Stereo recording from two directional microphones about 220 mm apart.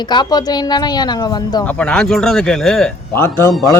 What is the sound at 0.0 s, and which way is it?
A woman's voice, 20° left (ahead or behind).